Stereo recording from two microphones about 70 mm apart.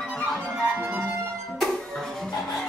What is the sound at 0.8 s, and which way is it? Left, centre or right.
Music, right.